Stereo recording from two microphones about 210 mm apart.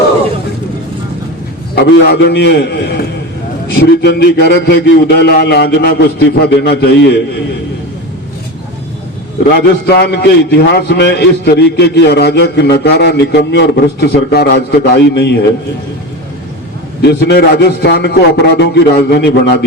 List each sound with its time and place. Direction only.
1.7 s a man's voice: 50° left (ahead or behind)
9.8 s a man's voice: 50° left (ahead or behind)
17.0 s a man's voice: 50° left (ahead or behind)